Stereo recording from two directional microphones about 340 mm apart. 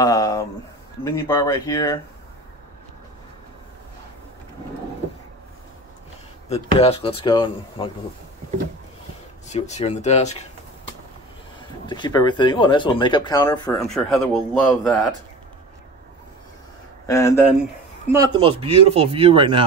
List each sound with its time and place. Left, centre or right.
0.0 s a sound: centre
1.0 s speech: centre
6.5 s speech: centre
9.5 s speech: centre
11.8 s speech: centre
17.0 s speech: centre
18.1 s speech: centre